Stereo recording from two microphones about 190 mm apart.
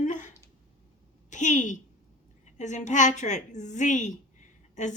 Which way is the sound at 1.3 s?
40° left (ahead or behind).